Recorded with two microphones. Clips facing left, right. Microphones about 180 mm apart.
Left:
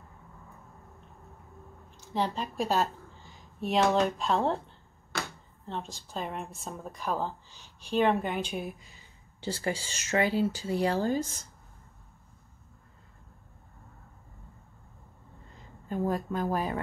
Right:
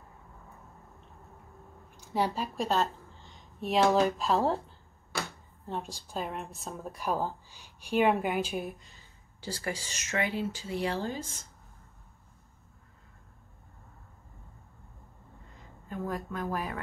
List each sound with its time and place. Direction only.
1.9 s a sound: 10° right (ahead or behind)
5.7 s a woman's voice: 10° right (ahead or behind)
9.4 s speech: 25° left (ahead or behind); by 11.2 s 45° left (ahead or behind)
15.9 s speech: 30° left (ahead or behind)